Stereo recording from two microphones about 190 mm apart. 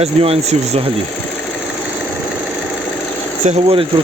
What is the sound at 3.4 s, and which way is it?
Speech, 35° right (ahead or behind).